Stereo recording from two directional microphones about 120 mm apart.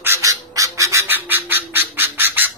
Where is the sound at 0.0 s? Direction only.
25° right (ahead or behind).